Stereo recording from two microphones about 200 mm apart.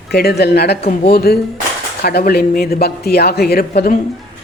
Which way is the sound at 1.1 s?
50° left (ahead or behind).